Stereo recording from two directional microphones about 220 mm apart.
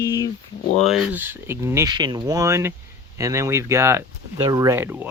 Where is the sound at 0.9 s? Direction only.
5° right (ahead or behind).